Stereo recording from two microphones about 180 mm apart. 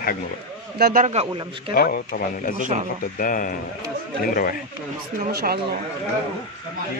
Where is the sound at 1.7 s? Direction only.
55° left (ahead or behind).